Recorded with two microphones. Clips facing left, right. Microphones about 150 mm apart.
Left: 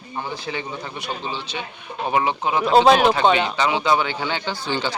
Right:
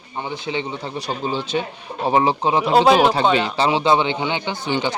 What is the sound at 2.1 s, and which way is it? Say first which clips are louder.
Speech: right 4 dB; 30° right (ahead or behind).